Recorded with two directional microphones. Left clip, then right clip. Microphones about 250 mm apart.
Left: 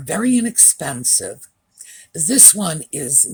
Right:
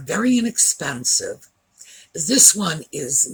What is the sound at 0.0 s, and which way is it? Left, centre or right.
Speech, left.